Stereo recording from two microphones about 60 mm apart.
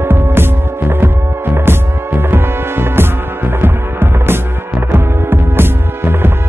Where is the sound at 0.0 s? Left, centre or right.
Right.